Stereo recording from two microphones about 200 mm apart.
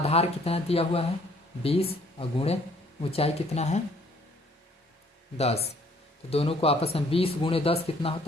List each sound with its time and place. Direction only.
0.0 s speech: 30° left (ahead or behind)
5.4 s speech: 30° left (ahead or behind)